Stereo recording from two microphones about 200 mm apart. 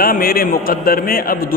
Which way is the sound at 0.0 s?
45° left (ahead or behind).